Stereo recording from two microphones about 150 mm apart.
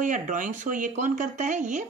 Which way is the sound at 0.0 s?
60° right (ahead or behind).